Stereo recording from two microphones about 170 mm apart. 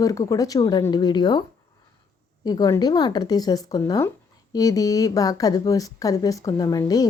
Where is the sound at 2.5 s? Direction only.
20° left (ahead or behind).